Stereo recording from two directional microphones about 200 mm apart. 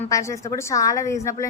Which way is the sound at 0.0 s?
15° left (ahead or behind).